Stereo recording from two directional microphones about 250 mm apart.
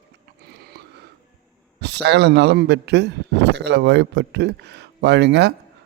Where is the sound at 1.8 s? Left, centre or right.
Right.